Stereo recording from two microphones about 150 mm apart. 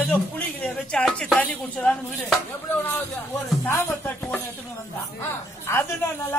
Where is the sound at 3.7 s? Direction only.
15° left (ahead or behind).